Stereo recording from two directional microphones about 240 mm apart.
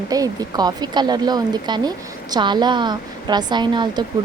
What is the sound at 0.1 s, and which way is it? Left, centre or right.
Speech, centre.